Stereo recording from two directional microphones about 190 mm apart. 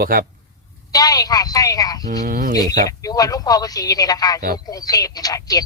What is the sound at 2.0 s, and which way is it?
Speech, 50° right (ahead or behind).